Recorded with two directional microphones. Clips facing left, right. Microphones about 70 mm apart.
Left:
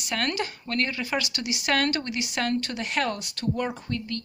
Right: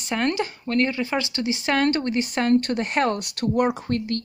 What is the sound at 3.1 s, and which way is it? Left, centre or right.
Speech, right.